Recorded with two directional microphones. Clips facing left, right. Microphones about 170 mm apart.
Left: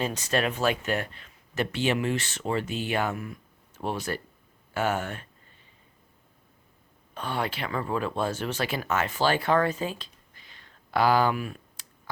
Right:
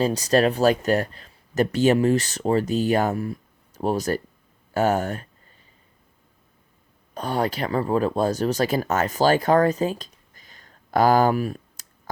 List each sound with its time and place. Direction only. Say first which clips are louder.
0.0 s speech: right 8 dB; 35° right (ahead or behind)
7.1 s speech: right 6 dB; 40° right (ahead or behind)